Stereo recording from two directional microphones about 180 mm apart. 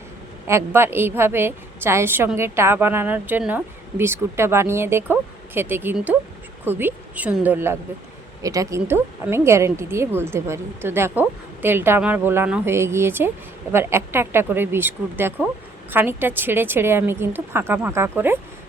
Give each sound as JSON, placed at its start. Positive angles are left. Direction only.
{"t": 0.4, "sound": "a woman's voice", "side_deg": -15}